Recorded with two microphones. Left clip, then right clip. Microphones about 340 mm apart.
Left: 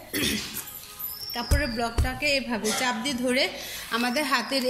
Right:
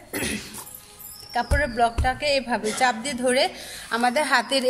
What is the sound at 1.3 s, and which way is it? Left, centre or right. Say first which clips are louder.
A woman's voice: right 6 dB; right.